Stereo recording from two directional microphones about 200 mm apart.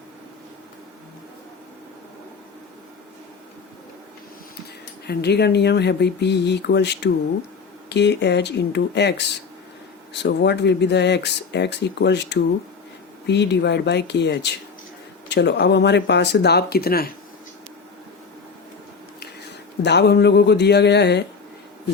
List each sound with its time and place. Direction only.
5.0 s speech: 55° left (ahead or behind)
19.8 s speech: 55° left (ahead or behind)